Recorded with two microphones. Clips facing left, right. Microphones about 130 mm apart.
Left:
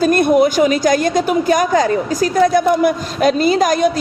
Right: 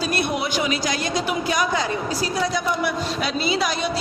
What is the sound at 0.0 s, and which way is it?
A man's voice, 50° left (ahead or behind).